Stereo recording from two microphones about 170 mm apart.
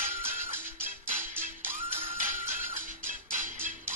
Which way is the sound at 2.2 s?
50° right (ahead or behind).